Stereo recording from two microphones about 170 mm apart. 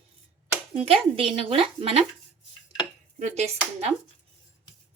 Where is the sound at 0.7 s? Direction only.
35° right (ahead or behind).